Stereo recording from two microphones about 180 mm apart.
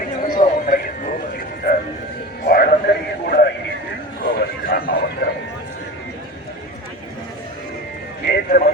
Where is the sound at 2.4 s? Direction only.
55° left (ahead or behind).